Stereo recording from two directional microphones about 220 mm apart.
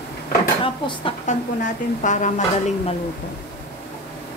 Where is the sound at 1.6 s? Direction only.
35° left (ahead or behind).